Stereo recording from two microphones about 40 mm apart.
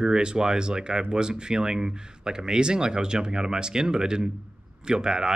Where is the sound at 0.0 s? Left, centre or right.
Right.